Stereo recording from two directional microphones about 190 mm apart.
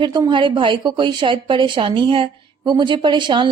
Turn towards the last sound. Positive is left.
turn(degrees=-25)  # may be behind; listen again after turning